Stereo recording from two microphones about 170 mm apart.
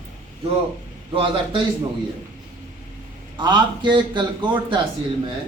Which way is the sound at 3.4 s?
25° right (ahead or behind).